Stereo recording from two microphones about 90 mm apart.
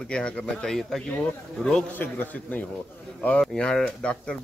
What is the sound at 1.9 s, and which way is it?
A man's voice, 20° left (ahead or behind).